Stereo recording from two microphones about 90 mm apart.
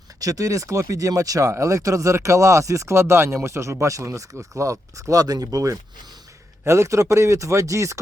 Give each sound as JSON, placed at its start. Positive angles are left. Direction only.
{"t": 0.2, "sound": "speech", "side_deg": -40}